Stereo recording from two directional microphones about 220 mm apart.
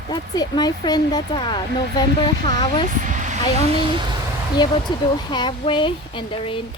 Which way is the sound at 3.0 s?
35° right (ahead or behind).